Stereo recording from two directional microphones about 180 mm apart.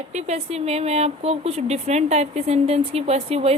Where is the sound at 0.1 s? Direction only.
40° right (ahead or behind).